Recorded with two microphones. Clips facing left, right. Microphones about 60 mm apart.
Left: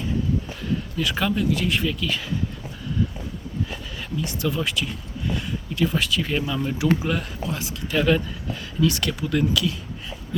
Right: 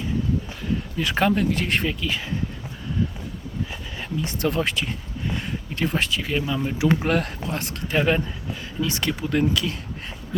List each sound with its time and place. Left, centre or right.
1.0 s speech: right
1.9 s speech: right
3.7 s a sound: right
4.4 s speech: right
6.2 s speech: centre
7.0 s speech: right
7.9 s speech: right